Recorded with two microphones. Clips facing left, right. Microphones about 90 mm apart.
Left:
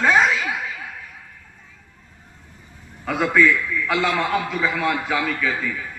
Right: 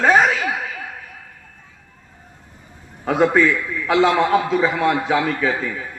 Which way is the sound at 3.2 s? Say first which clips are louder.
Right 1 dB; 30° right (ahead or behind).